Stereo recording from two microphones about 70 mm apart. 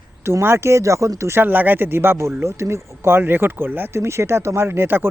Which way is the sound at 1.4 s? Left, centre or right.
Right.